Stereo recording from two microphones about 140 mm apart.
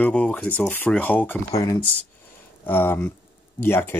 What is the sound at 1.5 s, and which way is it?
Speech, 25° left (ahead or behind).